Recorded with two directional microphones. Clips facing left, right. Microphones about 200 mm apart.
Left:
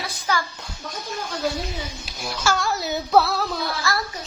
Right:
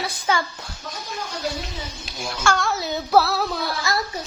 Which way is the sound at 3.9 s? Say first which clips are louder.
Right 1 dB; 20° right (ahead or behind).